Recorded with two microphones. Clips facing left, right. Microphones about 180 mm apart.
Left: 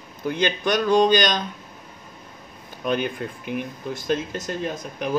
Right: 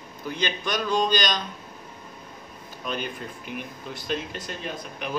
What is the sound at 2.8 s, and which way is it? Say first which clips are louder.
Speech: left 8 dB; 55° left (ahead or behind).